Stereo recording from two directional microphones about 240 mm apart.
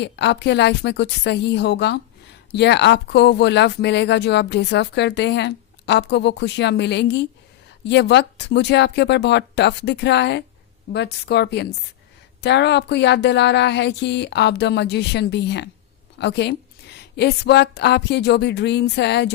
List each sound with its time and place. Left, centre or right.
0.0 s a woman's voice: left